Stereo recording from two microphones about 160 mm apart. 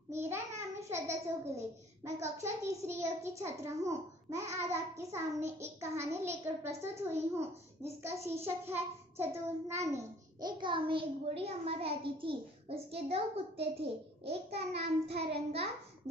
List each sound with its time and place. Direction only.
0.1 s child singing: 15° right (ahead or behind)
2.1 s a child's voice: 20° right (ahead or behind); by 15.7 s 40° right (ahead or behind)